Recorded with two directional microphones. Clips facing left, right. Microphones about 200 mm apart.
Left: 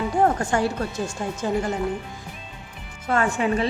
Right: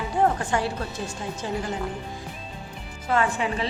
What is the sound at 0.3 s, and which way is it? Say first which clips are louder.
A woman's voice: left 3 dB; 45° left (ahead or behind).